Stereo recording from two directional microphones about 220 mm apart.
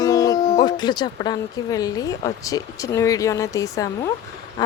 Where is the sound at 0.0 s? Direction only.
15° left (ahead or behind).